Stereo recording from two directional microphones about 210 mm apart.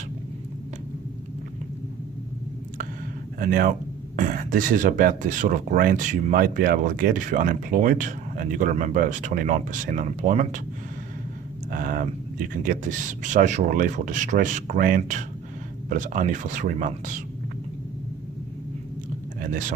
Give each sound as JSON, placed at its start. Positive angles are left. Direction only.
{"t": 3.3, "sound": "speech", "side_deg": -40}
{"t": 11.7, "sound": "speech", "side_deg": -40}
{"t": 19.4, "sound": "a sound", "side_deg": -40}